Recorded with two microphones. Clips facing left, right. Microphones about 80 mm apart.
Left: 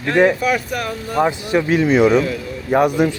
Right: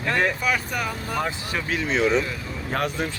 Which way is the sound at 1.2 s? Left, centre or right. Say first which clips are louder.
Left 13 dB; centre.